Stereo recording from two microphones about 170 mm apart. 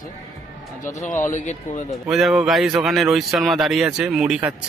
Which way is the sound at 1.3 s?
45° left (ahead or behind).